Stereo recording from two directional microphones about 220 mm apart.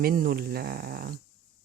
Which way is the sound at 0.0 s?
40° right (ahead or behind).